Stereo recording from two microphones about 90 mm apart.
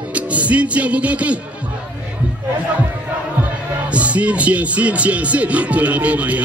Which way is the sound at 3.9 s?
15° right (ahead or behind).